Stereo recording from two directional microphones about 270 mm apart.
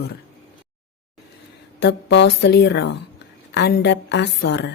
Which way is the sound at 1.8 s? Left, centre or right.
Left.